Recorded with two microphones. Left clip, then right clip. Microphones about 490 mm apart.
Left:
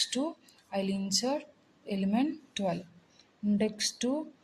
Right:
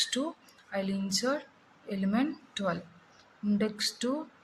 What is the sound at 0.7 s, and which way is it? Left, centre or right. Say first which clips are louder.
A woman's voice: left 1 dB; left.